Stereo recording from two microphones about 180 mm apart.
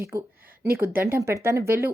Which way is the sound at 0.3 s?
55° right (ahead or behind).